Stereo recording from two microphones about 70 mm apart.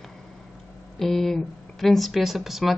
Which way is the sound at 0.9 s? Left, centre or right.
Centre.